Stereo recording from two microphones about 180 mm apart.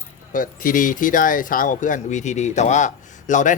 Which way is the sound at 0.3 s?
50° left (ahead or behind).